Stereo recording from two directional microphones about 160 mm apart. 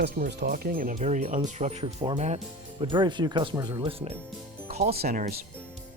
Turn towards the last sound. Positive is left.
turn(degrees=-75)  # may be behind; listen again after turning